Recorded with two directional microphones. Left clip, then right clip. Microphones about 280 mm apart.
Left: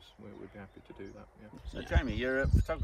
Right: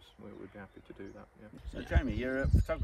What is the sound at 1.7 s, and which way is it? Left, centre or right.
Speech, centre.